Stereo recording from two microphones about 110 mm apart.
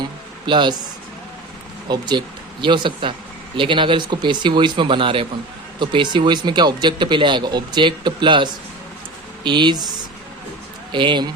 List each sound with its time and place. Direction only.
0.4 s speech: 45° right (ahead or behind)
1.9 s speech: 45° right (ahead or behind)
10.9 s speech: 45° right (ahead or behind)